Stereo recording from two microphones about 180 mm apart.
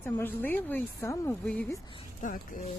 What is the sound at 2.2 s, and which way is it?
Speech, 45° left (ahead or behind).